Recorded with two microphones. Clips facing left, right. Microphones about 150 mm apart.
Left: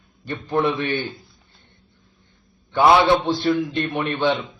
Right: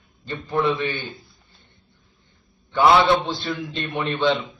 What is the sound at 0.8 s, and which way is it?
Speech, 60° left (ahead or behind).